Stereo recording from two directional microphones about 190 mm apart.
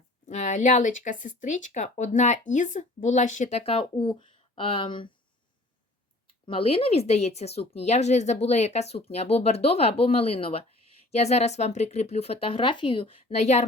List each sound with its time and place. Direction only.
0.3 s speech: 40° left (ahead or behind)
6.4 s speech: 30° left (ahead or behind)